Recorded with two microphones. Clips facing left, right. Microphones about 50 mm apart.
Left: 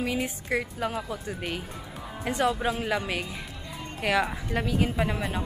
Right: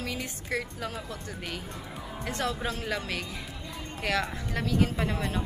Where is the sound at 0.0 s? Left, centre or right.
Centre.